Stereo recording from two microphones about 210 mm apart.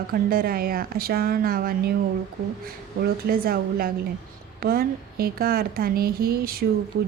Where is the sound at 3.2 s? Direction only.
45° right (ahead or behind).